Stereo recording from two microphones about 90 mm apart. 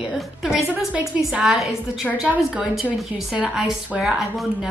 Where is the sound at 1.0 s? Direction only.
10° right (ahead or behind).